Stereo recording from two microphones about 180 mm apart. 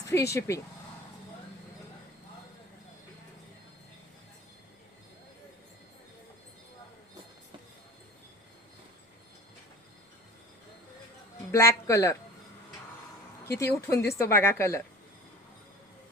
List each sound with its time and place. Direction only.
0.0 s speech: 15° left (ahead or behind)
11.5 s speech: 15° left (ahead or behind)
13.6 s speech: 15° left (ahead or behind)